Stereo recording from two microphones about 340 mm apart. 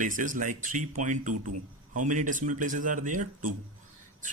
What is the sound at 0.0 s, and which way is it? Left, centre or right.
Speech, right.